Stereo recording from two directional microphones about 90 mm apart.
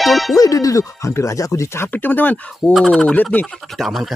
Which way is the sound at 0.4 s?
40° left (ahead or behind).